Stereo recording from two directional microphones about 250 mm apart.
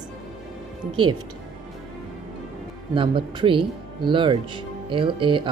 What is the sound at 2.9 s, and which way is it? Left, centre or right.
Speech, centre.